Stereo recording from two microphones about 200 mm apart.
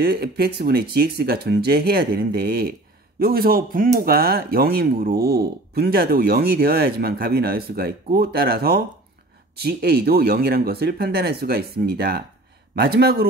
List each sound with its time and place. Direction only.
0.0 s speech: 50° right (ahead or behind)